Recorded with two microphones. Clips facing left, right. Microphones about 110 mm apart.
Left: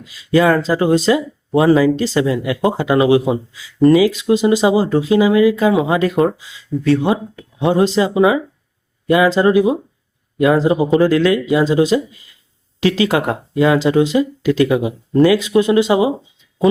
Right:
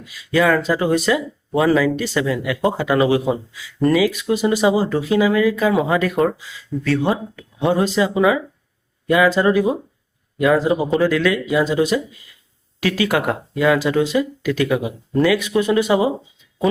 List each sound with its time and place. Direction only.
0.0 s speech: 25° left (ahead or behind)